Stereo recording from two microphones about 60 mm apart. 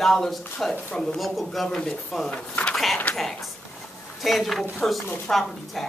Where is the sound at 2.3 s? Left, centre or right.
Centre.